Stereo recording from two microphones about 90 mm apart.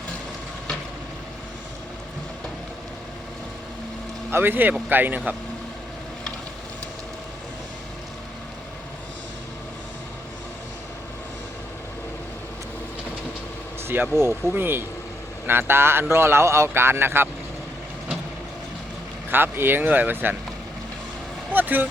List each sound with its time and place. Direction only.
4.3 s speech: 25° right (ahead or behind)
13.8 s speech: 25° right (ahead or behind)
19.3 s speech: 25° right (ahead or behind)
21.5 s speech: 20° right (ahead or behind)